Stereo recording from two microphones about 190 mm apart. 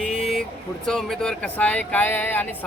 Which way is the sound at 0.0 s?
5° left (ahead or behind).